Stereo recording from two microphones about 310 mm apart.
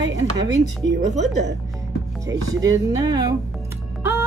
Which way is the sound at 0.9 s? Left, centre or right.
Right.